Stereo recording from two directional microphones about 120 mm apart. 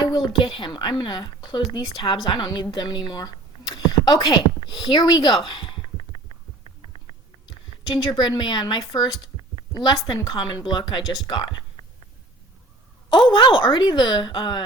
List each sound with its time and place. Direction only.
0.0 s a woman's voice: 35° left (ahead or behind)
7.9 s a woman's voice: 35° left (ahead or behind)
13.1 s a woman's voice: 40° left (ahead or behind)